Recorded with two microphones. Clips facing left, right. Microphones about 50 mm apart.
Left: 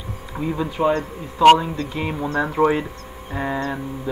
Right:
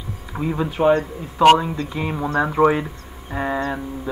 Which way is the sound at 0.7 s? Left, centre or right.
Right.